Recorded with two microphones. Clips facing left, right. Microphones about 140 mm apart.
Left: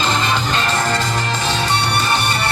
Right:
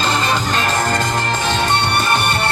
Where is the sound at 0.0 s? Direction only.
45° right (ahead or behind).